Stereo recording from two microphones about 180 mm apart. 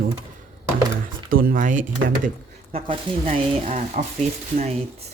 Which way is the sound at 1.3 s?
50° right (ahead or behind).